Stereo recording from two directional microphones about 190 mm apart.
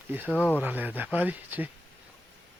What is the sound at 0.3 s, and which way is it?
Speech, 10° left (ahead or behind).